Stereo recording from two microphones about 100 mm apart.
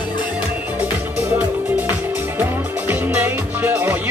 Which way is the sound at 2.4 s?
20° right (ahead or behind).